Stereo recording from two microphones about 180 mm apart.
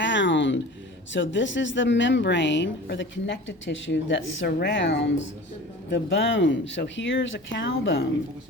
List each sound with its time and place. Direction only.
0.0 s speech: 90° left